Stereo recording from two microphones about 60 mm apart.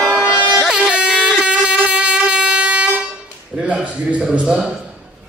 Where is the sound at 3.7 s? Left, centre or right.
Right.